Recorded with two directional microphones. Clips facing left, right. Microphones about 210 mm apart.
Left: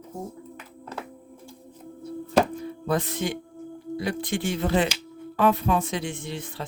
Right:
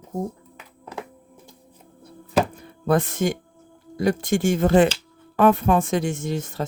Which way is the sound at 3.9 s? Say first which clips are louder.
Right 7 dB; 45° right (ahead or behind).